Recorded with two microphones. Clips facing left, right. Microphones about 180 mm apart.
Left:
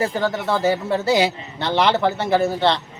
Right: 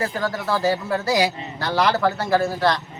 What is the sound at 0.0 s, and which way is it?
A man's voice, 25° left (ahead or behind).